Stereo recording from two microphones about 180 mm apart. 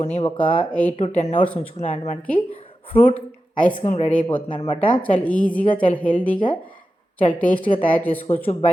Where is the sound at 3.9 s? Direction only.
40° left (ahead or behind).